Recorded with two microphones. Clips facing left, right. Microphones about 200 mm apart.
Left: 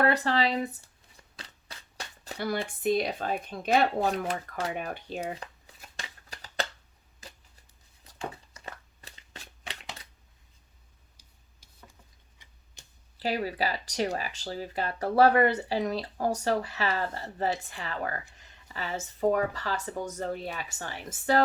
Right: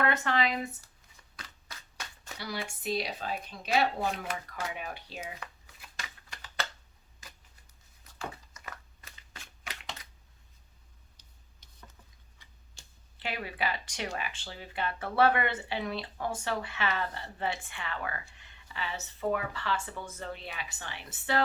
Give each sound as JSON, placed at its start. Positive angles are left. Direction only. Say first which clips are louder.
{"t": 0.0, "sound": "speech", "louder": "left 4 dB", "side_deg": 35}
{"t": 1.4, "sound": "shuffling cards", "louder": "left 1 dB", "side_deg": 35}
{"t": 2.4, "sound": "speech", "louder": "left 8 dB", "side_deg": 55}
{"t": 4.7, "sound": "speech", "louder": "left 6 dB", "side_deg": 50}
{"t": 5.2, "sound": "crumpling", "louder": "left 7 dB", "side_deg": 35}
{"t": 8.5, "sound": "a sound", "louder": "left 3 dB", "side_deg": 30}
{"t": 11.2, "sound": "a sound", "louder": "even", "side_deg": 10}
{"t": 12.8, "sound": "a sound", "louder": "left 2 dB", "side_deg": 20}
{"t": 13.1, "sound": "speech", "louder": "left 7 dB", "side_deg": 35}